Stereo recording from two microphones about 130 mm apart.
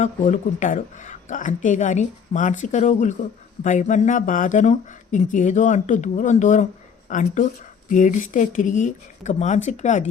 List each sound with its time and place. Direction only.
0.0 s speech: 75° left (ahead or behind)